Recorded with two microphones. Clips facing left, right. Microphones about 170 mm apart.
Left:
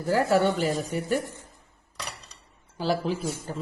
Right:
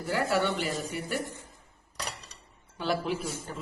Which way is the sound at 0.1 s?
40° left (ahead or behind).